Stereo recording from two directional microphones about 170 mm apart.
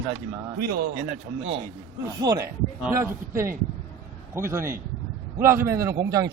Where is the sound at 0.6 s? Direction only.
60° right (ahead or behind).